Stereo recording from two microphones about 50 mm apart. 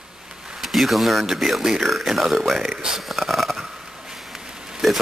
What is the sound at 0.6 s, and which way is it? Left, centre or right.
Speech, centre.